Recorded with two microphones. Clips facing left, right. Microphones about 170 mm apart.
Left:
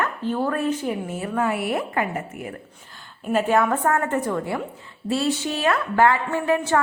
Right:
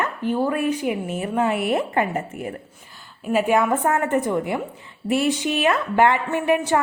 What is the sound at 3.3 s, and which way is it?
A woman's voice, 15° right (ahead or behind).